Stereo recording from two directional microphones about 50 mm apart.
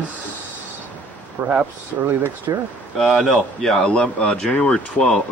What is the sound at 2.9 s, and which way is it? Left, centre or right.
Speech, centre.